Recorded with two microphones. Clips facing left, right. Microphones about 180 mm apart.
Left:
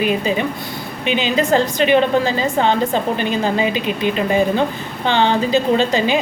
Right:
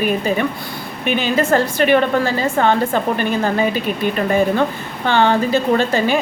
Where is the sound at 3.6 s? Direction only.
50° right (ahead or behind).